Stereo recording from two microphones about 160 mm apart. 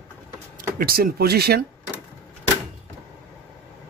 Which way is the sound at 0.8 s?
70° right (ahead or behind).